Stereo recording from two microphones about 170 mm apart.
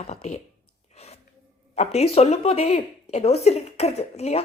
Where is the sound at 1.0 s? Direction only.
40° left (ahead or behind).